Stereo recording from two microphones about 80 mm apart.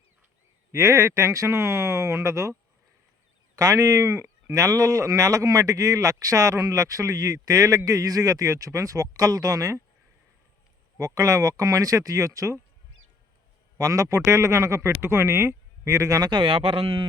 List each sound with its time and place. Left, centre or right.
0.7 s speech: right
10.9 s speech: right
13.7 s speech: right
16.2 s speech: right